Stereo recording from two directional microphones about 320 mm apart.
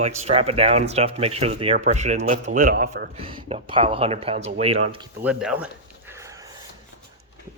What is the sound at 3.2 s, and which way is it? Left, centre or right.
Speech, centre.